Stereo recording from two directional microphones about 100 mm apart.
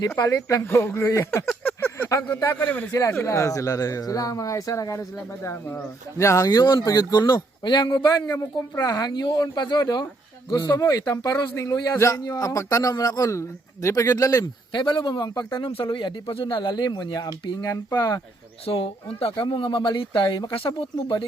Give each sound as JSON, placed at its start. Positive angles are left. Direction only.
{"t": 0.4, "sound": "speech", "side_deg": 30}
{"t": 1.6, "sound": "speech", "side_deg": 20}
{"t": 2.9, "sound": "speech", "side_deg": 30}
{"t": 14.7, "sound": "speech", "side_deg": 50}
{"t": 15.5, "sound": "speech", "side_deg": 60}
{"t": 18.6, "sound": "speech", "side_deg": 70}